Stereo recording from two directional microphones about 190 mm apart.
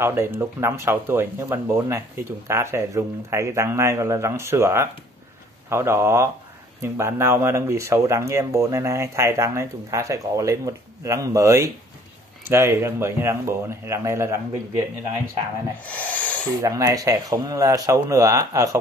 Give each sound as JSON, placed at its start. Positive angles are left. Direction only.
{"t": 0.0, "sound": "speech", "side_deg": -15}
{"t": 15.8, "sound": "owl", "side_deg": 10}
{"t": 16.6, "sound": "speech", "side_deg": -15}